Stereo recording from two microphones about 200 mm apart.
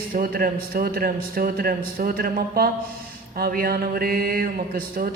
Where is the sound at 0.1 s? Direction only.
45° right (ahead or behind).